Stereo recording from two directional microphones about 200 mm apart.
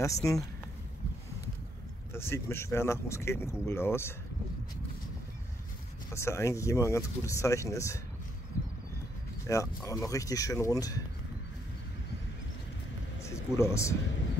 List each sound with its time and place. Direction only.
0.0 s speech: 15° left (ahead or behind)
2.1 s speech: 10° left (ahead or behind)
6.1 s speech: 15° left (ahead or behind)
9.5 s speech: 15° left (ahead or behind)
13.2 s speech: 15° left (ahead or behind)